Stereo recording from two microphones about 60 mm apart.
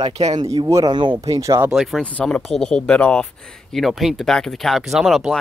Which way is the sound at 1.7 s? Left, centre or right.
Centre.